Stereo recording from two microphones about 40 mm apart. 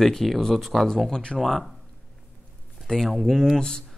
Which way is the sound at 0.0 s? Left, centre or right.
Centre.